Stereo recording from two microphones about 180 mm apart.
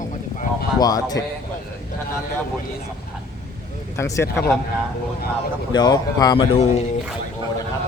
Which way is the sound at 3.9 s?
15° left (ahead or behind).